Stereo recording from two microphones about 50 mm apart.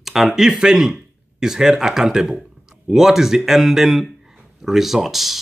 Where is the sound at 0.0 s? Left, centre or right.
Centre.